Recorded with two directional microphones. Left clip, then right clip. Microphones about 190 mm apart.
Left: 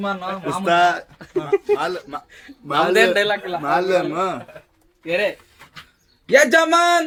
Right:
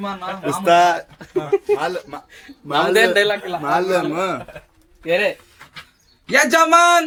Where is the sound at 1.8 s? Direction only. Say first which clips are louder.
Right 1 dB; 30° left (ahead or behind).